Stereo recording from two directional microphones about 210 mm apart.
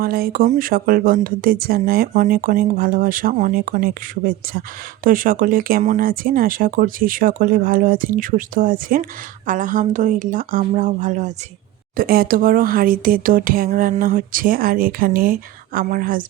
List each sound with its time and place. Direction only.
0.0 s speech: 45° right (ahead or behind)